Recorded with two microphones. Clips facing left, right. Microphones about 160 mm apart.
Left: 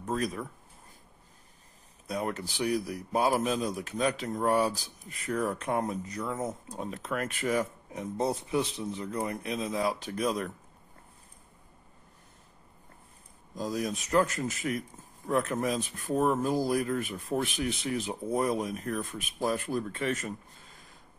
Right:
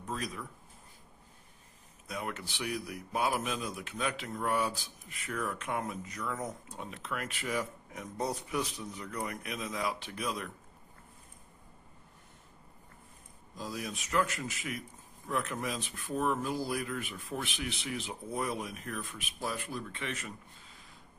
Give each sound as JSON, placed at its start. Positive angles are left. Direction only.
{"t": 0.0, "sound": "speech", "side_deg": 50}
{"t": 2.0, "sound": "a man's voice", "side_deg": 35}
{"t": 6.8, "sound": "a man's voice", "side_deg": 45}
{"t": 7.9, "sound": "a man's voice", "side_deg": 30}
{"t": 13.6, "sound": "a man's voice", "side_deg": 40}